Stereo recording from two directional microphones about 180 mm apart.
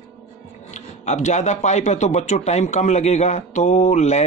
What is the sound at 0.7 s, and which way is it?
Speech, 40° left (ahead or behind).